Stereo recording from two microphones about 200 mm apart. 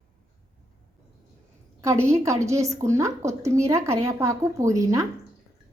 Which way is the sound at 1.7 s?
15° right (ahead or behind).